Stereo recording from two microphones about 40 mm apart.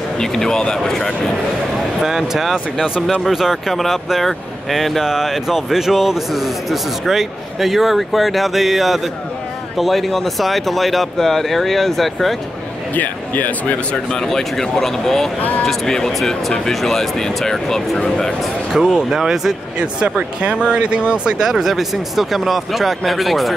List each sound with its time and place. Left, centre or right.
0.2 s speech: centre
2.0 s speech: centre
5.0 s speech: centre
12.9 s speech: left
14.2 s speech: centre
18.7 s speech: centre
20.3 s speech: right; by 23.5 s centre